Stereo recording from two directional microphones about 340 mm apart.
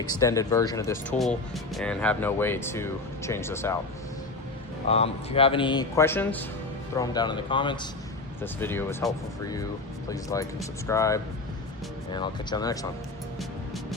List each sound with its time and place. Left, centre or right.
0.0 s speech: centre
4.9 s speech: centre